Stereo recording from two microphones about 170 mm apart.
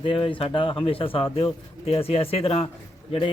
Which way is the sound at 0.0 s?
30° left (ahead or behind).